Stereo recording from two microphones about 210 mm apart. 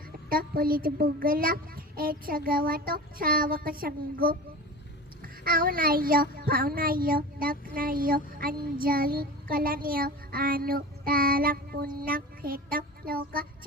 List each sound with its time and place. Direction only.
0.3 s speech: 45° right (ahead or behind)
12.0 s child singing: 45° right (ahead or behind)